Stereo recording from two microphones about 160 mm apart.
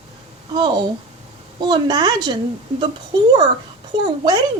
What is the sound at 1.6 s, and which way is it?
A woman's voice, 25° right (ahead or behind).